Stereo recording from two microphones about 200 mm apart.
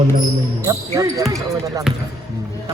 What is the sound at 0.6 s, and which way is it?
Speech, 15° right (ahead or behind).